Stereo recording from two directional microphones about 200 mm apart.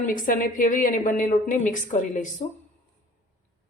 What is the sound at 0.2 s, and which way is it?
A woman's voice, 45° left (ahead or behind).